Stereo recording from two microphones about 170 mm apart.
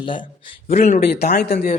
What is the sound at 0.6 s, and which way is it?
Speech, 45° left (ahead or behind).